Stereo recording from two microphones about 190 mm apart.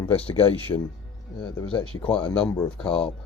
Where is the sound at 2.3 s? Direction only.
15° left (ahead or behind).